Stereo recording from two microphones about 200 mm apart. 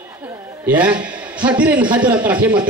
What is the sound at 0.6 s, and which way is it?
A man's voice, 5° right (ahead or behind).